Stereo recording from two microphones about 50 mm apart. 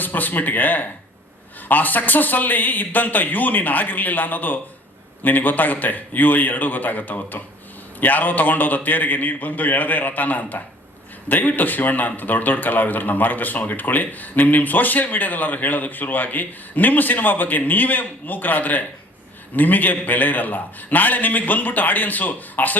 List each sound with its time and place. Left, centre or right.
0.0 s a man's voice: left